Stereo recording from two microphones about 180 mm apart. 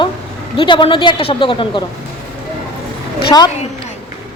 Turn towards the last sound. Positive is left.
turn(degrees=25)  # may be behind; listen again after turning